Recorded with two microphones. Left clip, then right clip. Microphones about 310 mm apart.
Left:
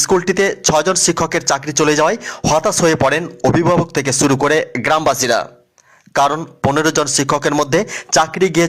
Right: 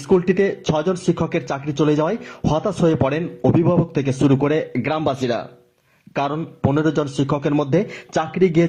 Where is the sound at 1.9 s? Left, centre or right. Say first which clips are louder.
Left 6 dB; left.